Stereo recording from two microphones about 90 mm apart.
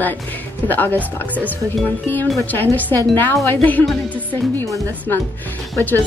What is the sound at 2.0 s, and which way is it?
Speech, 20° left (ahead or behind).